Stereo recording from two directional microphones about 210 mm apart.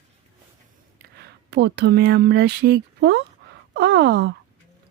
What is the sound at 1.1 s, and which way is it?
Speech, 50° right (ahead or behind).